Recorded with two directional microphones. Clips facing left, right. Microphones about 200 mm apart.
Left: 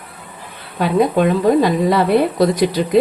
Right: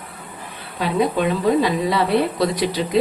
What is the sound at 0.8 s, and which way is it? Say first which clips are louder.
A woman's voice: left 5 dB; 50° left (ahead or behind).